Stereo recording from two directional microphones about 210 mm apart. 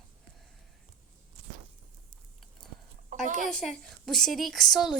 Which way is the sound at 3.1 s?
35° right (ahead or behind).